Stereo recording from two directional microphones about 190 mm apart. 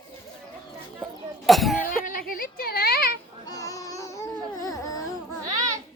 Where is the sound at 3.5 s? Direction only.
20° left (ahead or behind).